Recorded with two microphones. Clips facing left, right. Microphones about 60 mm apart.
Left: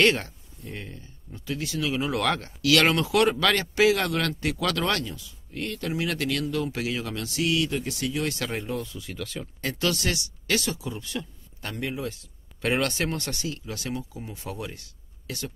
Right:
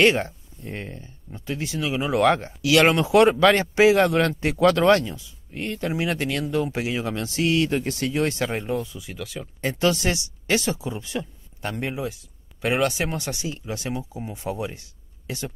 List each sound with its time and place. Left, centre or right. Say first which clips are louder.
0.0 s speech: right 3 dB; right
0.7 s speech: right 6 dB; right
8.5 s speech: right 4 dB; centre
9.6 s speech: right 5 dB; right
12.1 s speech: even; centre; by 15.5 s right